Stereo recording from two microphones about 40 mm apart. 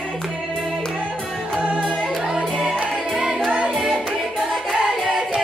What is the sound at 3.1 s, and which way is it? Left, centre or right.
Music, centre.